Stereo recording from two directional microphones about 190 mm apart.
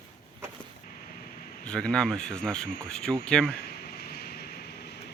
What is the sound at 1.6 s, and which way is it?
Speech, 5° left (ahead or behind).